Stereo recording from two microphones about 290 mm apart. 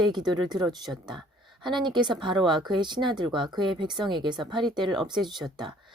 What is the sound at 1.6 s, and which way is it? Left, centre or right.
Speech, centre.